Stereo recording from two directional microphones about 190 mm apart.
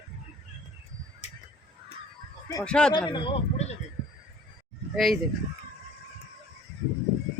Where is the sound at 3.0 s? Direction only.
25° left (ahead or behind).